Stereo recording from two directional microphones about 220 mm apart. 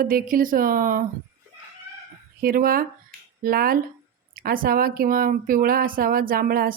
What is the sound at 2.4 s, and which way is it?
A woman's voice, 40° right (ahead or behind).